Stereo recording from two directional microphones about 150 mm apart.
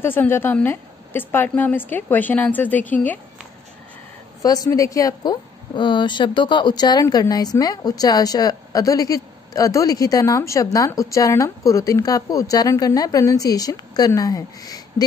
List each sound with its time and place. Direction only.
0.0 s a woman's voice: 15° left (ahead or behind)
4.4 s a woman's voice: 25° left (ahead or behind)